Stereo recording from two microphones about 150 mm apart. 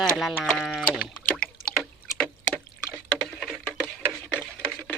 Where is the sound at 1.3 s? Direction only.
10° left (ahead or behind).